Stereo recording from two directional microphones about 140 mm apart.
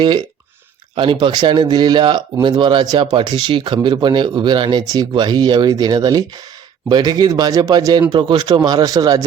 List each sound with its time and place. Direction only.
0.9 s speech: 35° right (ahead or behind)